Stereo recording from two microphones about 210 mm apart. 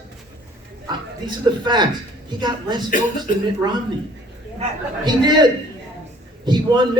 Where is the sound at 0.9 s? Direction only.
20° right (ahead or behind).